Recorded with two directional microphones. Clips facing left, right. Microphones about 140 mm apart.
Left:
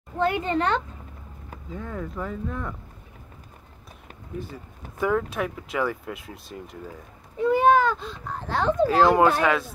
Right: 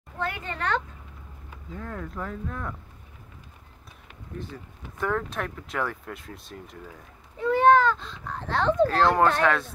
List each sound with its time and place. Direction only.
0.2 s speech: 20° left (ahead or behind)
1.8 s speech: 5° left (ahead or behind)
4.3 s speech: 10° left (ahead or behind)